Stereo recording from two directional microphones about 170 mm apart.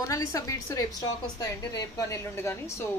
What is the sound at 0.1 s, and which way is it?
A woman's voice, 20° left (ahead or behind).